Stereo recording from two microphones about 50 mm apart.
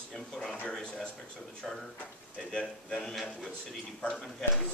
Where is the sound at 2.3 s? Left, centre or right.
Centre.